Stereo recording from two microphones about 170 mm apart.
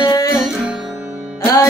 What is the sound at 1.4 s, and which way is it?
Music, 15° left (ahead or behind).